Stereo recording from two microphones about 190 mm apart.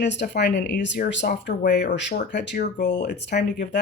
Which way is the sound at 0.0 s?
65° left (ahead or behind).